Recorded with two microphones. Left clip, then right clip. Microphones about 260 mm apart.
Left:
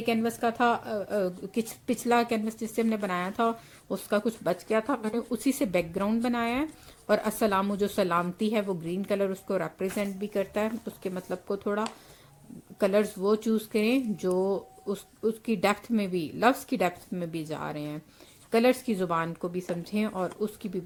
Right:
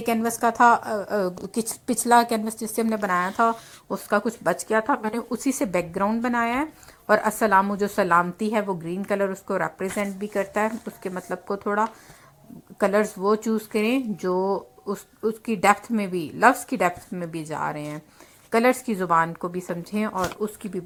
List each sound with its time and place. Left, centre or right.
0.0 s speech: centre
3.1 s speech: centre